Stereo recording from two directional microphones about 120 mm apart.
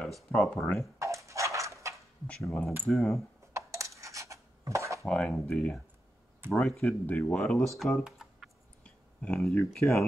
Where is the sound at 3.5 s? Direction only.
25° right (ahead or behind).